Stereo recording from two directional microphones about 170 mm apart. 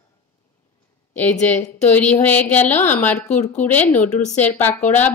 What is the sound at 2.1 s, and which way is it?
Speech, 10° left (ahead or behind).